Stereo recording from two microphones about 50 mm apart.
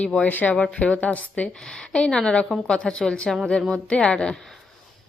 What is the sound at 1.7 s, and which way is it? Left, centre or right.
A woman's voice, centre.